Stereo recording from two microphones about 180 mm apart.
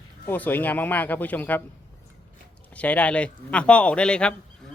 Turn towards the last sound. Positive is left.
turn(degrees=5)  # may be behind; listen again after turning